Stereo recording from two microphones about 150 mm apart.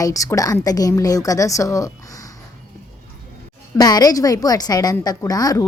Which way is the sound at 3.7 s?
25° left (ahead or behind).